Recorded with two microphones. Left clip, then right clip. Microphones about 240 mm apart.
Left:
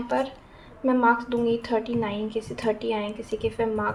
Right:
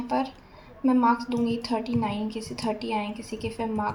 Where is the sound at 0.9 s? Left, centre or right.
Left.